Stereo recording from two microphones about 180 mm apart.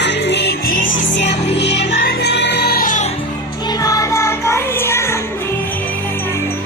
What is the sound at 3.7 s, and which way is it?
Music, 20° left (ahead or behind).